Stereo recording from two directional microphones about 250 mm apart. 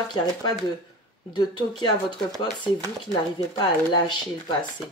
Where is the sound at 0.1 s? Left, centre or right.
Centre.